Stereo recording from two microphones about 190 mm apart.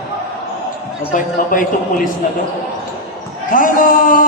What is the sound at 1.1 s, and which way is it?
A man's voice, 45° left (ahead or behind).